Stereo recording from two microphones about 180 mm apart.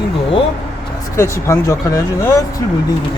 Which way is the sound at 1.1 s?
15° left (ahead or behind).